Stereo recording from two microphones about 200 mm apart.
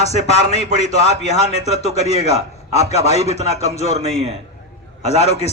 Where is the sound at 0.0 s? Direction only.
30° left (ahead or behind).